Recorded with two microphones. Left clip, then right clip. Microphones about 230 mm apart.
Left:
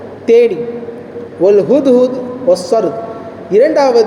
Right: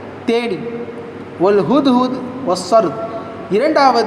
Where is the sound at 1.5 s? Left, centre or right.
Centre.